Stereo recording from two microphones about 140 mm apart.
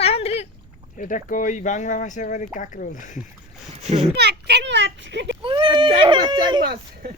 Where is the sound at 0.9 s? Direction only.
70° left (ahead or behind).